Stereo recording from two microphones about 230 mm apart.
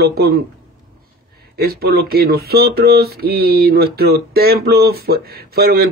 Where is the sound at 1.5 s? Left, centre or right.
Right.